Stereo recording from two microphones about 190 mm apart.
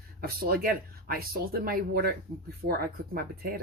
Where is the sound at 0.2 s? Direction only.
50° right (ahead or behind).